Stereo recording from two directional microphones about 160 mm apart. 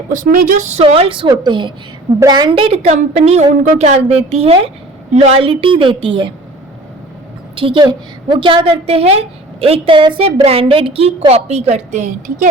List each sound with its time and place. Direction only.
0.1 s a woman's voice: 60° right (ahead or behind); by 6.3 s 30° right (ahead or behind)
7.5 s a woman's voice: 30° right (ahead or behind); by 12.5 s 45° right (ahead or behind)